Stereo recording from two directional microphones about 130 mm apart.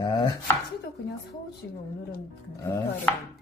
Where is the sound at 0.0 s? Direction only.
35° left (ahead or behind).